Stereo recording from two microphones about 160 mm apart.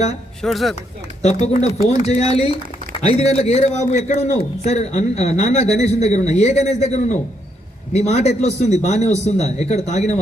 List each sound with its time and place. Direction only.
0.4 s speech: centre (ahead or behind)
1.5 s a man's voice: 40° left (ahead or behind)